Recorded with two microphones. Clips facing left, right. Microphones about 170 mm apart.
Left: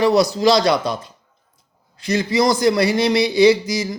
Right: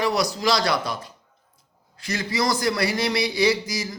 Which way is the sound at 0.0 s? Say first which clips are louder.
Left 8 dB; 25° left (ahead or behind).